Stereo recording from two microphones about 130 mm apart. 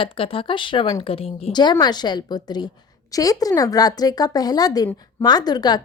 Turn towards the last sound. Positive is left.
turn(degrees=30)  # may be behind; listen again after turning